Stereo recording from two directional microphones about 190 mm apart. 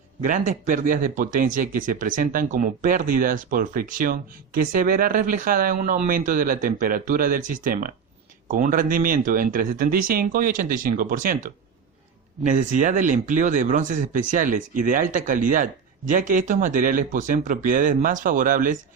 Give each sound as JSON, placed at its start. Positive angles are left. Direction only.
{"t": 0.2, "sound": "speech", "side_deg": -45}